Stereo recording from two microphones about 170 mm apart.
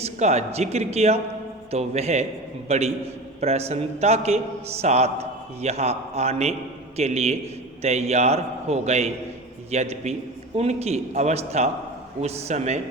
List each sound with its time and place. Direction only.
0.0 s a man's voice: 40° right (ahead or behind)